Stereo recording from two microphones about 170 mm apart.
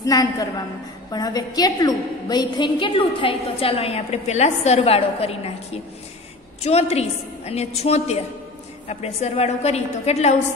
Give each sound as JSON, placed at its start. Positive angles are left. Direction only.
{"t": 0.0, "sound": "a woman's voice", "side_deg": 20}